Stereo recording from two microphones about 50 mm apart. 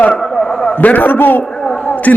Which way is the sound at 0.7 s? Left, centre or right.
Left.